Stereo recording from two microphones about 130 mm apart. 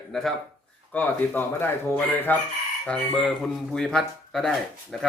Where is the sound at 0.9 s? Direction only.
15° left (ahead or behind).